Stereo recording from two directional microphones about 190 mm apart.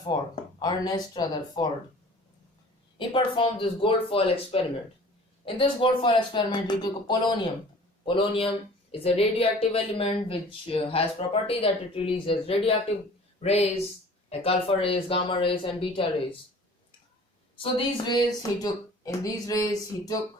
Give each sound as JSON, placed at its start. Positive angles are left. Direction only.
{"t": 0.1, "sound": "speech", "side_deg": 20}
{"t": 3.0, "sound": "speech", "side_deg": 25}
{"t": 17.6, "sound": "speech", "side_deg": 25}